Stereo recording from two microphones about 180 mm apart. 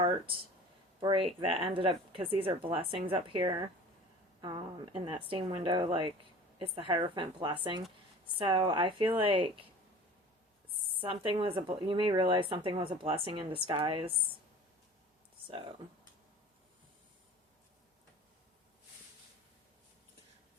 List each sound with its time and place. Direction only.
0.9 s speech: 30° right (ahead or behind)
4.4 s a sound: 25° right (ahead or behind)
5.1 s speech: 25° right (ahead or behind)
11.0 s speech: 30° right (ahead or behind)